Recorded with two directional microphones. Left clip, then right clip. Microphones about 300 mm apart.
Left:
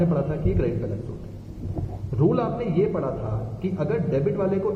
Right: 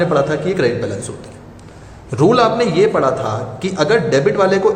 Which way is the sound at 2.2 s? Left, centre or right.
Right.